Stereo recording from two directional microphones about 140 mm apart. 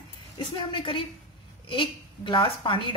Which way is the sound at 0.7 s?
40° left (ahead or behind).